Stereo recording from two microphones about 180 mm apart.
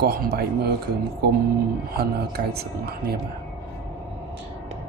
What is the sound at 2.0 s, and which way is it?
Speech, 60° right (ahead or behind).